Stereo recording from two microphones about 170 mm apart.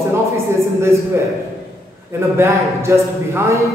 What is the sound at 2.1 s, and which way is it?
A man's voice, 15° right (ahead or behind).